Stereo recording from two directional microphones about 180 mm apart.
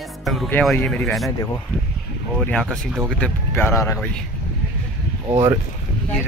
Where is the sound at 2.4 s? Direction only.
5° left (ahead or behind).